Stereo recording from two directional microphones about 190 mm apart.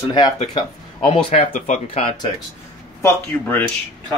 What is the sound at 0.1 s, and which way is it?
Speech, 25° left (ahead or behind).